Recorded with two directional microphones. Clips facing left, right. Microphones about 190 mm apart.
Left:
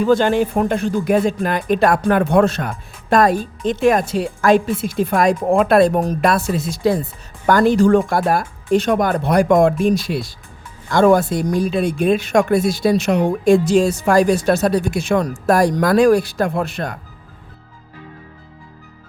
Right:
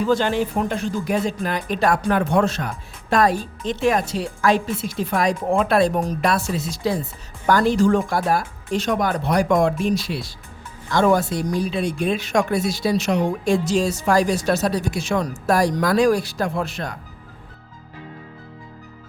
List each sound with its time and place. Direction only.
0.1 s speech: 50° left (ahead or behind)